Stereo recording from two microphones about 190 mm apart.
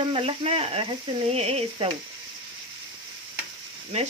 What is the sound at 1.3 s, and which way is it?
Sizzle, 30° right (ahead or behind).